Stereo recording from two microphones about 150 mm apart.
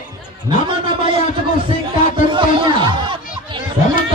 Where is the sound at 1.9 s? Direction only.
35° right (ahead or behind).